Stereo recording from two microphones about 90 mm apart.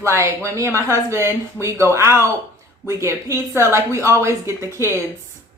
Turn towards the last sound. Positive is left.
turn(degrees=-30)  # may be behind; listen again after turning